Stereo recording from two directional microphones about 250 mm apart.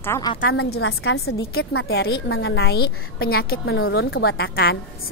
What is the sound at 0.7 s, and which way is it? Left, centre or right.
Speech, left.